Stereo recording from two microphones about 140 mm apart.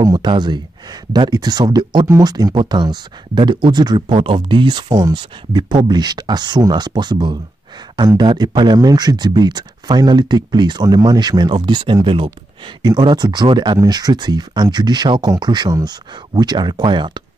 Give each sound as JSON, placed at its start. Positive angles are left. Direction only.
{"t": 0.0, "sound": "speech", "side_deg": -30}